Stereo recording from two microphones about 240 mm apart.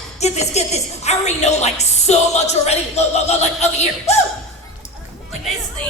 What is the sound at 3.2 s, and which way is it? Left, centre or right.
Music, left.